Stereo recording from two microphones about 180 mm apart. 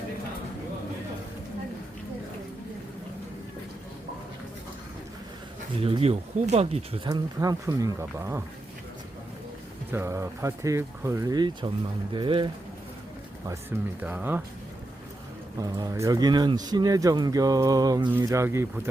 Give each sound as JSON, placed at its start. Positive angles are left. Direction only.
{"t": 5.8, "sound": "speech", "side_deg": -35}
{"t": 7.1, "sound": "speech", "side_deg": -20}
{"t": 9.9, "sound": "speech", "side_deg": -15}
{"t": 13.5, "sound": "speech", "side_deg": -10}
{"t": 15.5, "sound": "speech", "side_deg": -20}